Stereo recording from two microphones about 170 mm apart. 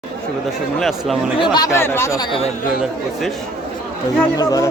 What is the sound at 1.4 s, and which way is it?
Speech, 20° left (ahead or behind).